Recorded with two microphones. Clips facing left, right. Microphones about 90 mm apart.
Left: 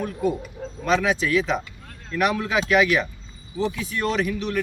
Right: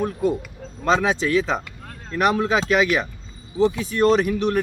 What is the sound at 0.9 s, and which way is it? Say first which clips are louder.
Speech: right 2 dB; 30° right (ahead or behind).